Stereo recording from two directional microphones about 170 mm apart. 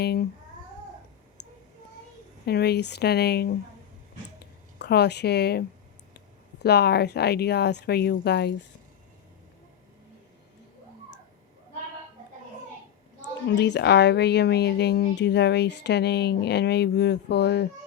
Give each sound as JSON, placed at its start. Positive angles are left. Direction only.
{"t": 0.0, "sound": "speech", "side_deg": 70}
{"t": 2.5, "sound": "speech", "side_deg": 70}
{"t": 4.8, "sound": "speech", "side_deg": 75}
{"t": 13.5, "sound": "speech", "side_deg": 90}